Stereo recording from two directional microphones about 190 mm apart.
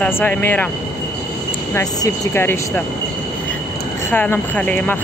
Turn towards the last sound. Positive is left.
turn(degrees=10)  # may be behind; listen again after turning